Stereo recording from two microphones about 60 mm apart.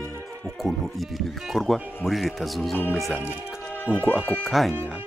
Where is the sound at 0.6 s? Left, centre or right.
Centre.